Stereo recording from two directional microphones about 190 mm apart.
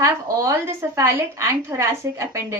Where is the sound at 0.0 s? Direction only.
15° right (ahead or behind).